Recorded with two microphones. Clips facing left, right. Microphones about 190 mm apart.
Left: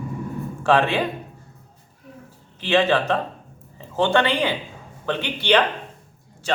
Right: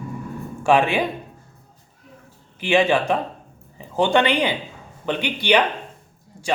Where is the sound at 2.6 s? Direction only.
15° right (ahead or behind).